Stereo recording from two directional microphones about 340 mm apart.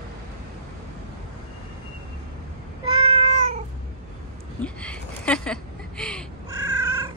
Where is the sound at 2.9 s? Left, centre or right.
Centre.